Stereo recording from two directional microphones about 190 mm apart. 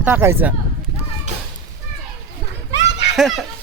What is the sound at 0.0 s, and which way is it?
Speech, 10° right (ahead or behind).